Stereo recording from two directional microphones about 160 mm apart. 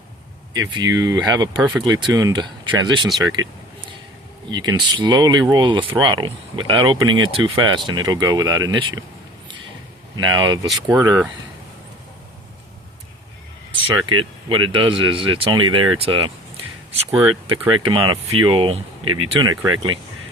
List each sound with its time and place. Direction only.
0.5 s speech: 25° right (ahead or behind)
3.2 s a sound: 25° right (ahead or behind)
4.9 s speech: 25° right (ahead or behind)
10.2 s speech: 30° right (ahead or behind)
13.9 s speech: 30° right (ahead or behind)